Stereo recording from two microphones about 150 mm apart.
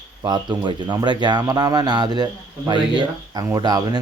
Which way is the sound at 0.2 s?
30° right (ahead or behind).